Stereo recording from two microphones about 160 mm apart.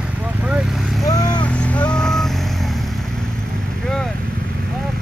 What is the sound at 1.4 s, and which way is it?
Vehicle, 10° left (ahead or behind).